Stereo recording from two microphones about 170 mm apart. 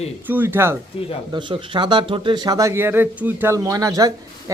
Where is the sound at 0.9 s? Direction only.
35° left (ahead or behind).